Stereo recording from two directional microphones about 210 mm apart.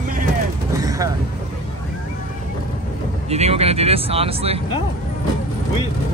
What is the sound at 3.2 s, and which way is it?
Speech, 30° right (ahead or behind).